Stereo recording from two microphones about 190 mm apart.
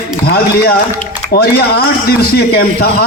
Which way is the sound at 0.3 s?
55° left (ahead or behind).